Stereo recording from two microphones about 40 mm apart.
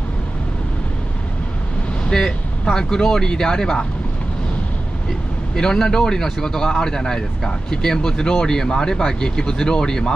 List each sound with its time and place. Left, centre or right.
2.0 s speech: centre
5.5 s speech: centre